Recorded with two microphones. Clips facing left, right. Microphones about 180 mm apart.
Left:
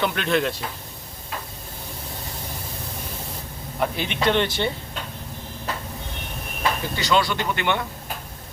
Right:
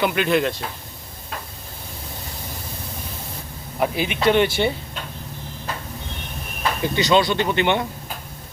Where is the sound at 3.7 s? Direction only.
5° right (ahead or behind).